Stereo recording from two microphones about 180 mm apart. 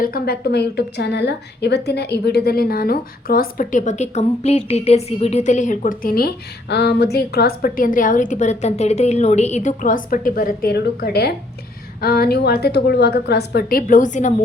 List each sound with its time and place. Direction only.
0.0 s a woman's voice: 55° left (ahead or behind)